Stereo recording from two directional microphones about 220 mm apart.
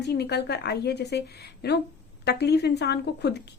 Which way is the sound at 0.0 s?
50° left (ahead or behind).